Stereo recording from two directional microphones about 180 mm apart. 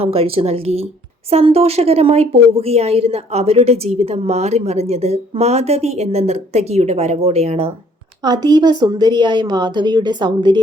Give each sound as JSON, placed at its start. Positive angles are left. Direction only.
{"t": 0.0, "sound": "a woman's voice", "side_deg": -35}
{"t": 8.2, "sound": "speech", "side_deg": -25}